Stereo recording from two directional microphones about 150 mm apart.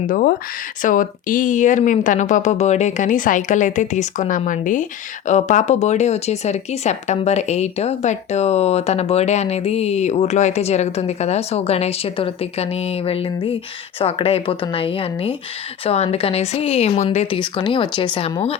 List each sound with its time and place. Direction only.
0.1 s speech: 65° left (ahead or behind); by 18.5 s 40° left (ahead or behind)